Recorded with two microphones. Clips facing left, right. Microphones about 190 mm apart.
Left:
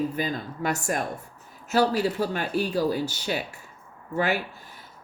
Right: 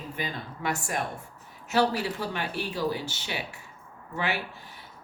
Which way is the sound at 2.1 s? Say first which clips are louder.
Left 6 dB; 45° left (ahead or behind).